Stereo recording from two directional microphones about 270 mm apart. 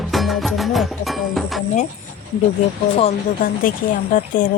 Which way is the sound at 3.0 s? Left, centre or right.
Left.